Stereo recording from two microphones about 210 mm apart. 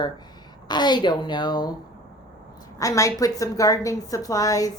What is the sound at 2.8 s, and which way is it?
A woman's voice, 15° left (ahead or behind).